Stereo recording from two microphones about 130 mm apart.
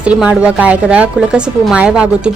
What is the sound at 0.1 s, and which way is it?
A woman's voice, 10° right (ahead or behind).